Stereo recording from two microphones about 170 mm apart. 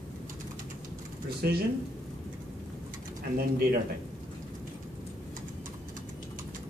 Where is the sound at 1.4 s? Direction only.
65° right (ahead or behind).